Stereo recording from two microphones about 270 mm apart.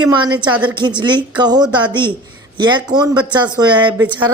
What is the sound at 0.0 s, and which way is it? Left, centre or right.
Speech, centre.